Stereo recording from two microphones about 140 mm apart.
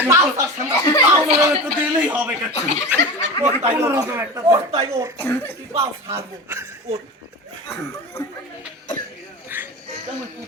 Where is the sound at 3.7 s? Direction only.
15° right (ahead or behind).